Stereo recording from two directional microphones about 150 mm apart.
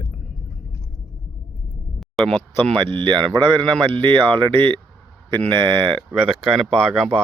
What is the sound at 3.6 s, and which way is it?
Speech, 5° left (ahead or behind).